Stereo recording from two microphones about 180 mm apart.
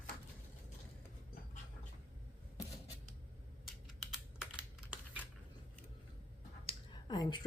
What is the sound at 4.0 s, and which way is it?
Computer keyboard, 5° right (ahead or behind).